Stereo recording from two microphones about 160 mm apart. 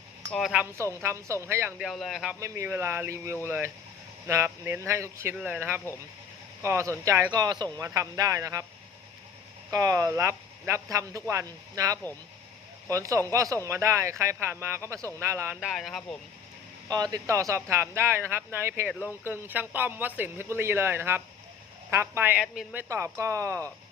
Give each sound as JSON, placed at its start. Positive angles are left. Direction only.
{"t": 0.3, "sound": "speech", "side_deg": 5}
{"t": 0.5, "sound": "speech", "side_deg": -10}
{"t": 1.8, "sound": "speech", "side_deg": 0}
{"t": 2.4, "sound": "speech", "side_deg": -15}
{"t": 9.7, "sound": "speech", "side_deg": -20}
{"t": 15.6, "sound": "speech", "side_deg": 0}
{"t": 16.9, "sound": "speech", "side_deg": -25}